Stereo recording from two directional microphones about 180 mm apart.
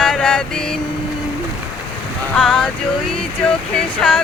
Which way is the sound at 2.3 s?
5° left (ahead or behind).